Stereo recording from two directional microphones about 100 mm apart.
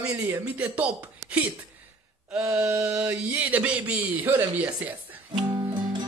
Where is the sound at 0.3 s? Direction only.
15° right (ahead or behind).